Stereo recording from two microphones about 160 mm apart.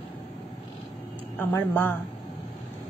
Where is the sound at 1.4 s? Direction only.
15° left (ahead or behind).